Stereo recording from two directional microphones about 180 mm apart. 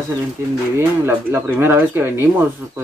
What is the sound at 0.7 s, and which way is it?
Speech, 15° right (ahead or behind).